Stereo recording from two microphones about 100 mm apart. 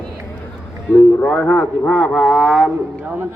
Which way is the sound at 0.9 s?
15° left (ahead or behind).